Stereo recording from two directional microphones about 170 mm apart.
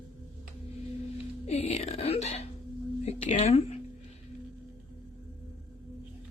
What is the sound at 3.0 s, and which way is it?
Speech, 40° left (ahead or behind).